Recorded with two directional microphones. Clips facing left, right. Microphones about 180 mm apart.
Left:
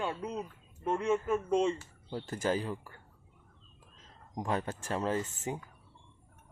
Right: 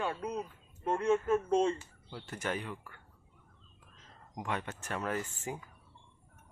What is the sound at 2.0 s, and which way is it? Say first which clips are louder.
Speech: left 6 dB; 35° left (ahead or behind).